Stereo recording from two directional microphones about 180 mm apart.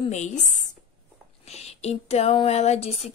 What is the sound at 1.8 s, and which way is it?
Speech, 35° left (ahead or behind).